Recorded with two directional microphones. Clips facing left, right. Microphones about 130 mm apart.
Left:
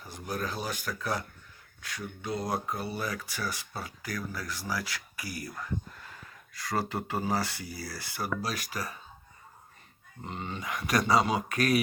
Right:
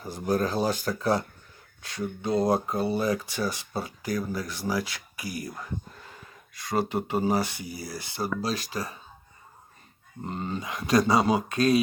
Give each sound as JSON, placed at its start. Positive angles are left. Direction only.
{"t": 0.0, "sound": "speech", "side_deg": -35}
{"t": 10.2, "sound": "speech", "side_deg": -40}
{"t": 10.6, "sound": "speech", "side_deg": -25}